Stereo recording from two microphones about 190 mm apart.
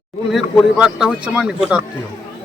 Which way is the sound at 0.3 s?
5° right (ahead or behind).